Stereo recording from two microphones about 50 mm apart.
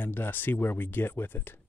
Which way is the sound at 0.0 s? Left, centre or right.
Left.